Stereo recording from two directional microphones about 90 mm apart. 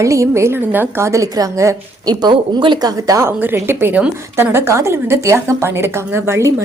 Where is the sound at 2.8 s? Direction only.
40° right (ahead or behind).